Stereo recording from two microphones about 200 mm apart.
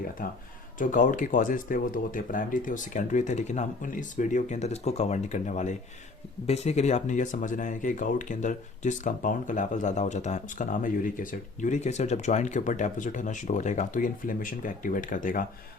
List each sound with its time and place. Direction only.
0.8 s speech: 40° left (ahead or behind)